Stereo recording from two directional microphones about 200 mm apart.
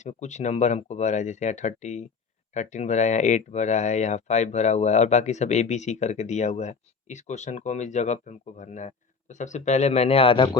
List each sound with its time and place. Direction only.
0.0 s speech: 35° left (ahead or behind)